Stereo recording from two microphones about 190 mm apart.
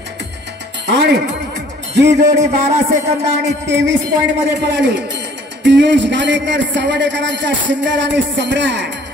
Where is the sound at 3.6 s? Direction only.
70° right (ahead or behind).